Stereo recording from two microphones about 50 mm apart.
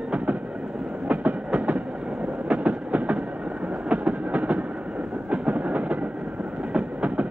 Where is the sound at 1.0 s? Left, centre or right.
Right.